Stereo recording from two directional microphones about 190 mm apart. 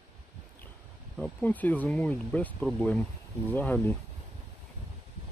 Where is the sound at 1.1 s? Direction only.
5° left (ahead or behind).